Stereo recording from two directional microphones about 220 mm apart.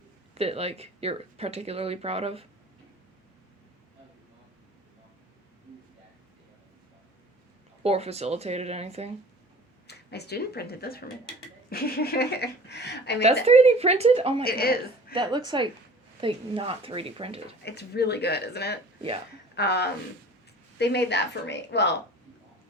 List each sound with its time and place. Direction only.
0.3 s speech: 30° right (ahead or behind)
7.8 s speech: 30° right (ahead or behind)
9.8 s a woman's voice: 50° left (ahead or behind)
13.2 s speech: 30° right (ahead or behind)
14.4 s a woman's voice: 45° left (ahead or behind)
15.1 s speech: 20° right (ahead or behind)
17.7 s a woman's voice: 50° left (ahead or behind)